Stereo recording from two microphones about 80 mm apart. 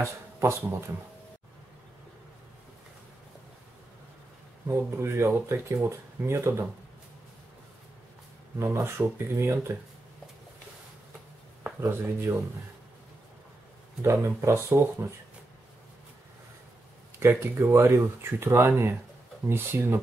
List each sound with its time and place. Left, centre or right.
0.0 s speech: right
4.6 s speech: right
8.7 s speech: right
11.8 s speech: right
14.0 s speech: right
17.2 s speech: right